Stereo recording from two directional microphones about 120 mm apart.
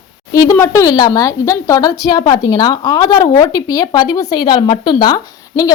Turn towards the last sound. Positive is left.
turn(degrees=30)  # may be behind; listen again after turning